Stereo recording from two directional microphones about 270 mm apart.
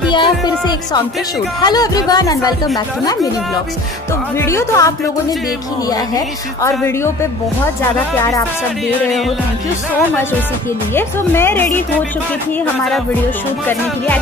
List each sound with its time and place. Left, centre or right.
0.1 s a woman's voice: centre
4.4 s a woman's voice: centre
8.2 s a woman's voice: centre
11.0 s a woman's voice: centre
13.7 s a woman's voice: centre